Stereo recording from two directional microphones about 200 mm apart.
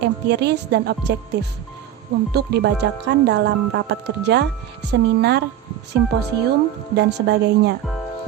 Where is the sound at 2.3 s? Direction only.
55° right (ahead or behind).